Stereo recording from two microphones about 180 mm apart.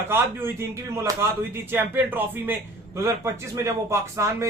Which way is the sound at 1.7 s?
10° right (ahead or behind).